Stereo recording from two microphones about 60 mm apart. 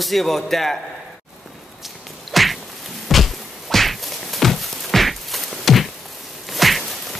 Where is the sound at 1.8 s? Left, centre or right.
Centre.